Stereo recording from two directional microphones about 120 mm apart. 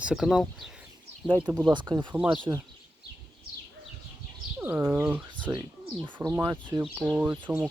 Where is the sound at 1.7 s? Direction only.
40° right (ahead or behind).